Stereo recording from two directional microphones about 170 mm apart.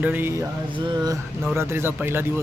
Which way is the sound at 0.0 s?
10° right (ahead or behind).